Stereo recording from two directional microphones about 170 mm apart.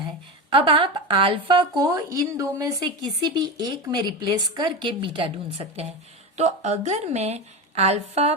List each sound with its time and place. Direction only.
0.5 s a woman's voice: 30° right (ahead or behind)